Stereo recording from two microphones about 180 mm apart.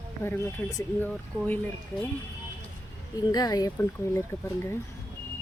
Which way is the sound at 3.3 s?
20° left (ahead or behind).